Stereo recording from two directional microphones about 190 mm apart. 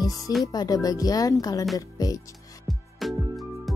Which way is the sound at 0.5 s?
20° left (ahead or behind).